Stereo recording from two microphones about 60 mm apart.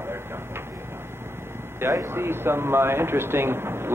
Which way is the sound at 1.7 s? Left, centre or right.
Right.